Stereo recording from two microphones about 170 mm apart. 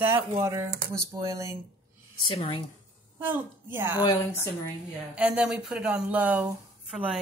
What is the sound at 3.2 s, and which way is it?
Speech, 15° right (ahead or behind).